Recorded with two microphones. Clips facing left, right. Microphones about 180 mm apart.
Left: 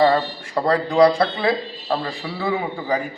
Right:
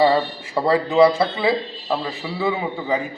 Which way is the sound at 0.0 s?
5° right (ahead or behind).